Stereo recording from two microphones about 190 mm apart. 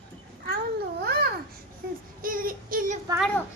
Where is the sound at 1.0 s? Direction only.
55° right (ahead or behind).